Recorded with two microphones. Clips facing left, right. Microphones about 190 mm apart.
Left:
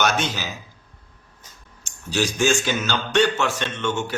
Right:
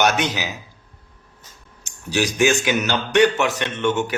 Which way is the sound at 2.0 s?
15° right (ahead or behind).